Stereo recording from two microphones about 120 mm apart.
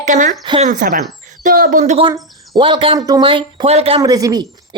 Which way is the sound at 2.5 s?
45° right (ahead or behind).